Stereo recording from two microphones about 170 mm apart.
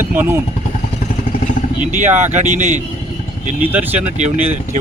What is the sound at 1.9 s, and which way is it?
Speech, 10° right (ahead or behind).